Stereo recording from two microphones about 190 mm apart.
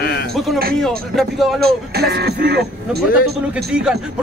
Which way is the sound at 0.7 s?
Centre (ahead or behind).